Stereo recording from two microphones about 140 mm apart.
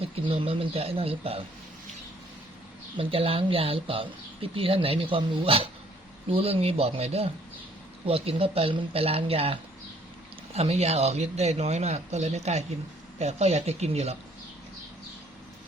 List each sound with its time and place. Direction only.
0.0 s a man's voice: 40° right (ahead or behind)
3.0 s a man's voice: 45° right (ahead or behind)